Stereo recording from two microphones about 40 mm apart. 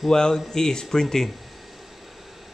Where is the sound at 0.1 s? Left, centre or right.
Centre.